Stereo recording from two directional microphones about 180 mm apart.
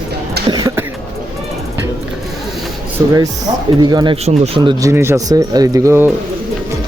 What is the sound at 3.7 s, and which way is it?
Speech, 25° right (ahead or behind).